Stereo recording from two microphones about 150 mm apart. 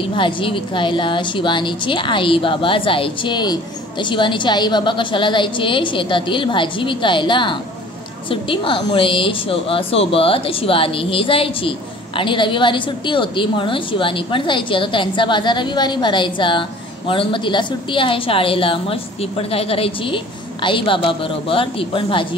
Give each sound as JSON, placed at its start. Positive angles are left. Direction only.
{"t": 0.1, "sound": "a woman's voice", "side_deg": 35}